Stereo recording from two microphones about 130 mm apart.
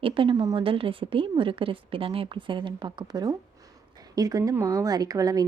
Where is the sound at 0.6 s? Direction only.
45° right (ahead or behind).